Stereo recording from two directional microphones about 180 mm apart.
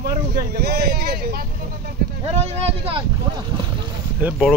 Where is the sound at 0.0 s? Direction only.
60° right (ahead or behind).